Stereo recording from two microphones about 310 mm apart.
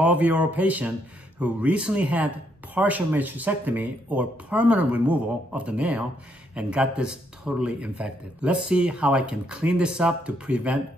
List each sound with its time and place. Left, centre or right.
0.0 s speech: centre